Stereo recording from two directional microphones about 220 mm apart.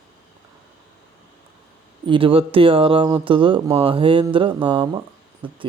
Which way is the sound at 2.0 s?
25° right (ahead or behind).